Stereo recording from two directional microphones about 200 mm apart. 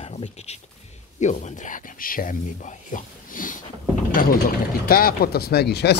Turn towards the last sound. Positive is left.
turn(degrees=55)  # may be behind; listen again after turning